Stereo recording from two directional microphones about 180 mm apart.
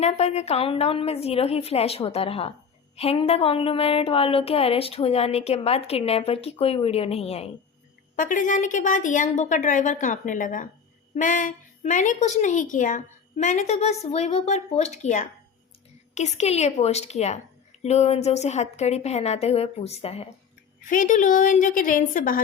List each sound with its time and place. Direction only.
0.0 s a woman's voice: 35° left (ahead or behind)
8.1 s a woman's voice: 45° left (ahead or behind)
20.9 s a woman's voice: 45° left (ahead or behind)